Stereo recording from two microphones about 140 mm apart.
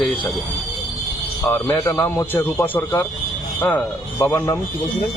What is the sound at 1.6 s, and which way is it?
A man's voice, 20° left (ahead or behind).